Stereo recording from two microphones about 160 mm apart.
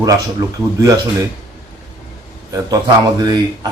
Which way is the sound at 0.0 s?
20° right (ahead or behind).